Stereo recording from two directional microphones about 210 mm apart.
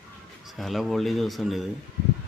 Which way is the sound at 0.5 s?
Centre (ahead or behind).